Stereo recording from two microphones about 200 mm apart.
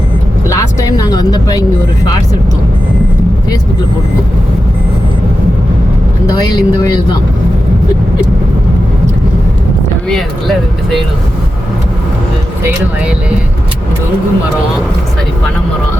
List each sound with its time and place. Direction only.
0.4 s vehicle: 15° left (ahead or behind)
6.2 s speech: 20° left (ahead or behind)
10.1 s speech: centre (ahead or behind)